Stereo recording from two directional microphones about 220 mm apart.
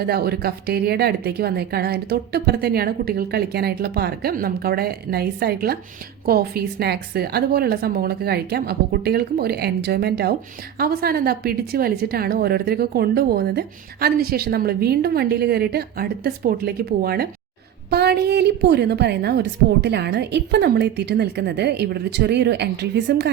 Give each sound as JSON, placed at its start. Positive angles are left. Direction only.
{"t": 0.0, "sound": "a woman's voice", "side_deg": -45}